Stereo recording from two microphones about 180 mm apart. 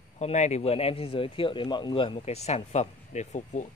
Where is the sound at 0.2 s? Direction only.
40° left (ahead or behind).